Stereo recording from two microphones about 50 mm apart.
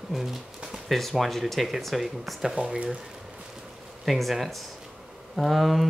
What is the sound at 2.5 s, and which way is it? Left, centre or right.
Speech, right.